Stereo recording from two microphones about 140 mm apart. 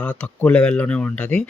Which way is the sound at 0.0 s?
10° left (ahead or behind).